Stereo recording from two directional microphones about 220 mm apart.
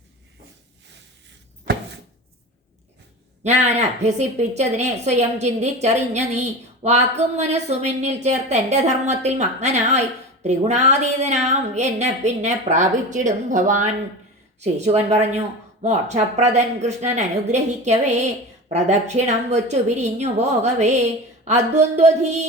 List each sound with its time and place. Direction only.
3.4 s a woman's voice: 30° right (ahead or behind)